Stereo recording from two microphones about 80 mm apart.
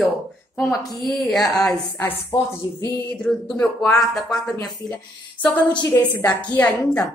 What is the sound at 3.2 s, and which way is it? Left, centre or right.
A woman's voice, centre.